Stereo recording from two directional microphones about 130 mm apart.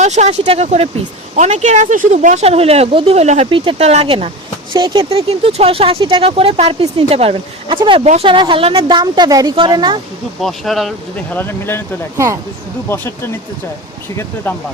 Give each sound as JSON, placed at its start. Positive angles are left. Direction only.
{"t": 0.0, "sound": "speech", "side_deg": -60}
{"t": 3.5, "sound": "speech", "side_deg": -40}
{"t": 4.7, "sound": "a woman's voice", "side_deg": -35}
{"t": 10.4, "sound": "speech", "side_deg": 0}
{"t": 11.3, "sound": "speech", "side_deg": 15}
{"t": 12.1, "sound": "speech", "side_deg": -20}
{"t": 12.9, "sound": "speech", "side_deg": 20}